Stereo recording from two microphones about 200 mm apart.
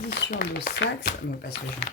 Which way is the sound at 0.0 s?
55° left (ahead or behind).